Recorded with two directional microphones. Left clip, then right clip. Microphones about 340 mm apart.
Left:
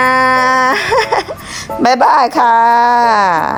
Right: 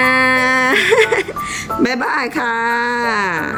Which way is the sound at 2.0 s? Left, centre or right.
Left.